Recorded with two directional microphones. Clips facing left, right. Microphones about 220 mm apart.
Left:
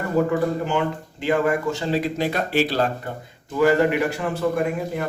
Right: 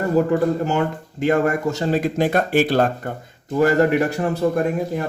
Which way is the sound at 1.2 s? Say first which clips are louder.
Right 3 dB; 45° right (ahead or behind).